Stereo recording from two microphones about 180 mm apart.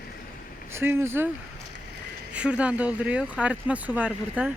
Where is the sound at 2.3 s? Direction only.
5° right (ahead or behind).